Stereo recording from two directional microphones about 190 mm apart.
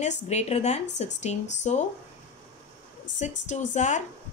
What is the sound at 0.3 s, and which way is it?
A woman's voice, 35° left (ahead or behind).